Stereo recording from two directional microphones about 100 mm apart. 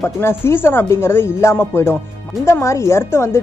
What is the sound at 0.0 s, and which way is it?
Speech, 20° left (ahead or behind).